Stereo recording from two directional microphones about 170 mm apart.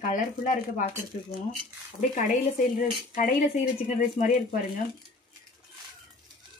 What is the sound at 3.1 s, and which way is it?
Speech, 50° left (ahead or behind).